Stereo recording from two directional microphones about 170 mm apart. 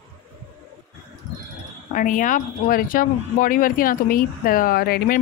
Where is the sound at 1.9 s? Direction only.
50° left (ahead or behind).